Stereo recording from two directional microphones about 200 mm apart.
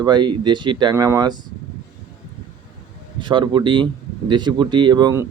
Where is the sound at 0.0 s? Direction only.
20° right (ahead or behind).